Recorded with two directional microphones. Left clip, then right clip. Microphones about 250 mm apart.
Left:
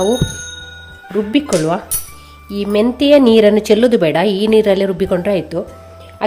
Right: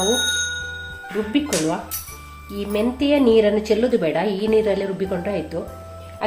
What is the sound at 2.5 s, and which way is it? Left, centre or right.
A woman's voice, left.